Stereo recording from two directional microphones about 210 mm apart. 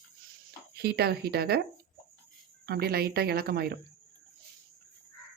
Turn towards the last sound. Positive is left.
turn(degrees=-50)  # may be behind; listen again after turning